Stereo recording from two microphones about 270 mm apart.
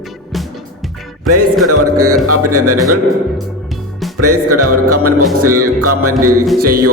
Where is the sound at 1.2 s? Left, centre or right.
Right.